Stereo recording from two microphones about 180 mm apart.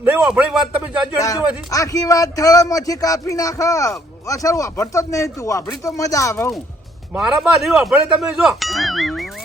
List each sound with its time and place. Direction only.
0.0 s a man's voice: 5° right (ahead or behind)
1.2 s a man's voice: 20° left (ahead or behind)
7.1 s speech: 5° right (ahead or behind)